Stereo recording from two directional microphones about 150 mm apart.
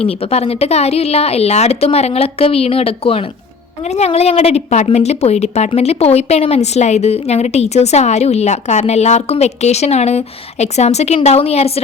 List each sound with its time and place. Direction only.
0.0 s a woman's voice: 40° left (ahead or behind)